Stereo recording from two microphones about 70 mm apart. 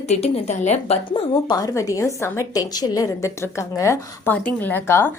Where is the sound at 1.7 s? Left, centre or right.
Left.